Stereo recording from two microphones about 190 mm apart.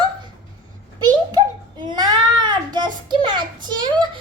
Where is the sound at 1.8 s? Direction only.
20° right (ahead or behind).